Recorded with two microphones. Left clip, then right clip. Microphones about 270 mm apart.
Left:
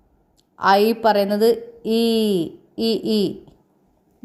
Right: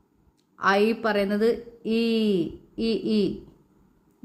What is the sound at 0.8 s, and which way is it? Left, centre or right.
A woman's voice, centre.